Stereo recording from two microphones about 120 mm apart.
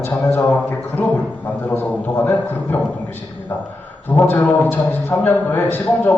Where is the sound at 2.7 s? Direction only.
15° left (ahead or behind).